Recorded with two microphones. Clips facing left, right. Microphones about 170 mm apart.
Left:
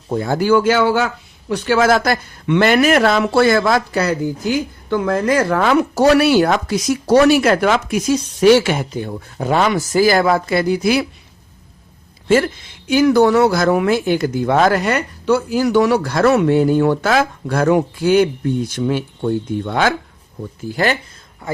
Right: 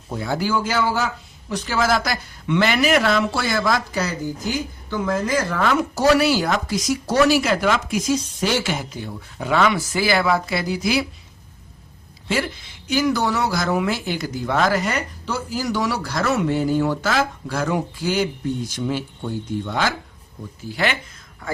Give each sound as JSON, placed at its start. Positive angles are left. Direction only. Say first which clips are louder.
{"t": 0.1, "sound": "speech", "louder": "left 8 dB", "side_deg": 50}
{"t": 12.9, "sound": "speech", "louder": "left 8 dB", "side_deg": 55}
{"t": 20.7, "sound": "speech", "louder": "left 5 dB", "side_deg": 40}